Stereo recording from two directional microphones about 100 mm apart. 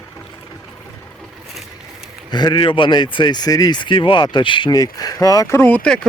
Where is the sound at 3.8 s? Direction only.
55° left (ahead or behind).